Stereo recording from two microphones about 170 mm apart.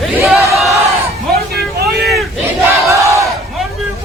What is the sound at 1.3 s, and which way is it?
Vehicle, 65° right (ahead or behind).